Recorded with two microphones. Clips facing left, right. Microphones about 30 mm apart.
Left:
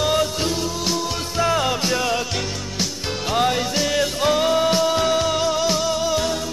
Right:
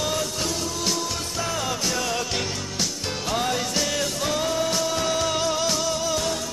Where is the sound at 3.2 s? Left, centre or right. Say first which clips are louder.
Left 6 dB; left.